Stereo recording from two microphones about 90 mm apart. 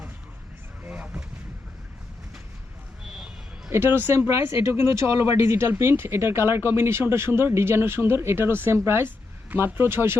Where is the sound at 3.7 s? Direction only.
25° right (ahead or behind).